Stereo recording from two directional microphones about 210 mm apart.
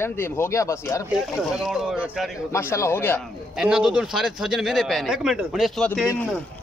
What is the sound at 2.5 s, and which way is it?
Speech, 10° left (ahead or behind).